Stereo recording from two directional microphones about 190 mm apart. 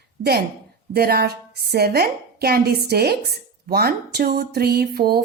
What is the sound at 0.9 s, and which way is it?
Speech, 55° right (ahead or behind).